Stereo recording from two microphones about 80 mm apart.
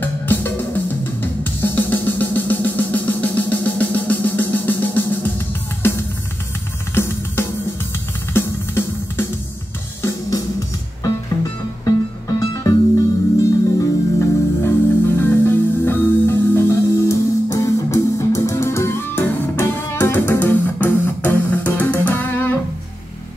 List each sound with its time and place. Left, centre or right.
0.0 s music: left
8.3 s music: left
11.8 s music: left